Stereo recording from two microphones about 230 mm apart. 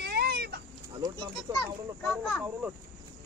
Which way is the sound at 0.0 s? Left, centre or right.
Right.